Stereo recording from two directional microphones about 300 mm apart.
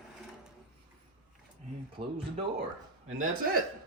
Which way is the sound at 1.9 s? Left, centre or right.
Centre.